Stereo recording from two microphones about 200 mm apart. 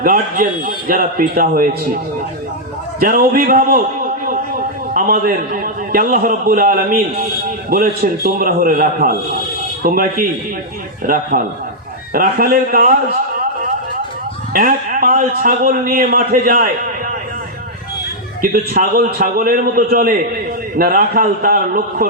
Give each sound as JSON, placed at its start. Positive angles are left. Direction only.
{"t": 0.0, "sound": "a man's voice", "side_deg": -45}
{"t": 3.0, "sound": "a man's voice", "side_deg": -45}
{"t": 14.5, "sound": "a man's voice", "side_deg": -45}
{"t": 18.5, "sound": "a man's voice", "side_deg": -45}